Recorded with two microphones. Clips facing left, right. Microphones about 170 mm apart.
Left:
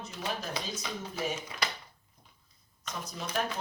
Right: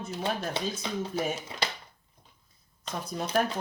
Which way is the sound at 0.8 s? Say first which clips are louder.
Right 5 dB; 30° right (ahead or behind).